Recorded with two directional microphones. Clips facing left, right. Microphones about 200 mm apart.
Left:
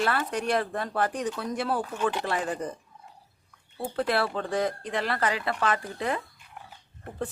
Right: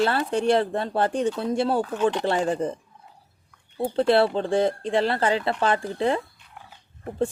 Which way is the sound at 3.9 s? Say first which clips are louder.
Right 7 dB; 30° right (ahead or behind).